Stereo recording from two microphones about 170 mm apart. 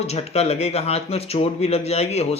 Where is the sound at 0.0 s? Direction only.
40° left (ahead or behind).